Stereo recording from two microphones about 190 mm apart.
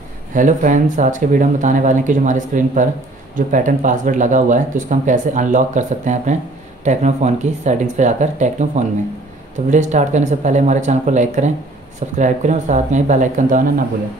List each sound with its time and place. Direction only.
0.3 s speech: 45° right (ahead or behind)